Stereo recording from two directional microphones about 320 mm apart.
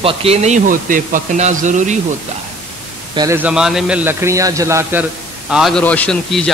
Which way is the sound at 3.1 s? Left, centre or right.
Centre.